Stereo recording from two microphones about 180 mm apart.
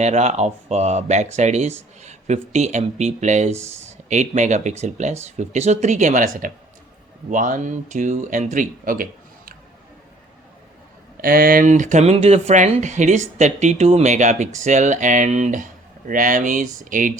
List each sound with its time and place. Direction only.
0.0 s speech: 40° right (ahead or behind)
11.2 s speech: 55° right (ahead or behind)